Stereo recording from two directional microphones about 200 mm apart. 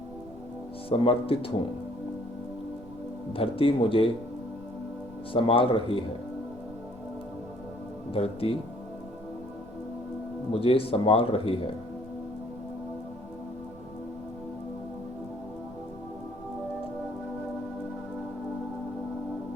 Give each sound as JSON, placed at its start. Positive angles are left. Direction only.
{"t": 0.9, "sound": "speech", "side_deg": 30}
{"t": 3.3, "sound": "speech", "side_deg": 30}
{"t": 5.3, "sound": "speech", "side_deg": 25}
{"t": 8.1, "sound": "speech", "side_deg": 30}
{"t": 10.5, "sound": "speech", "side_deg": 25}